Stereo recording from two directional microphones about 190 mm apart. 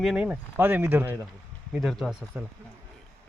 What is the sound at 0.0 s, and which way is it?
Speech, 5° right (ahead or behind).